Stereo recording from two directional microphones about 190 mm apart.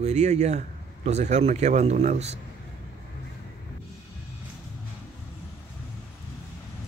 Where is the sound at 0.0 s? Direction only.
35° right (ahead or behind).